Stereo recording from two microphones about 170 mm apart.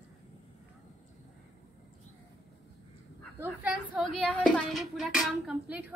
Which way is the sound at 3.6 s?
5° right (ahead or behind).